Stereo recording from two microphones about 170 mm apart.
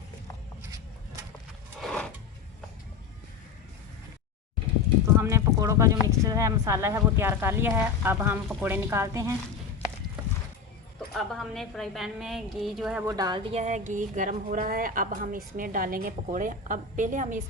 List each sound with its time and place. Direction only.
1.8 s a sound: 5° left (ahead or behind)
5.2 s speech: 20° right (ahead or behind)
11.1 s a woman's voice: centre (ahead or behind)
13.1 s speech: 25° right (ahead or behind)
13.5 s speech: 45° right (ahead or behind)